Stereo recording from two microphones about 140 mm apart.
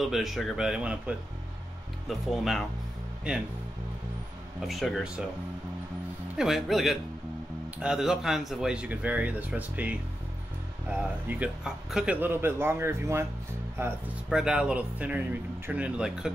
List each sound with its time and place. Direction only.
0.0 s speech: centre (ahead or behind)
4.6 s speech: centre (ahead or behind)
6.3 s speech: centre (ahead or behind)
14.3 s speech: 5° right (ahead or behind)